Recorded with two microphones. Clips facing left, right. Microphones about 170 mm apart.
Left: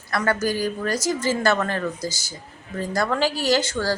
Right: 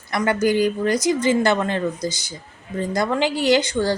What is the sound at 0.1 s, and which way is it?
A woman's voice, 20° right (ahead or behind).